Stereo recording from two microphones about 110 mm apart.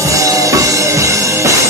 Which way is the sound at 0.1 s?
30° right (ahead or behind).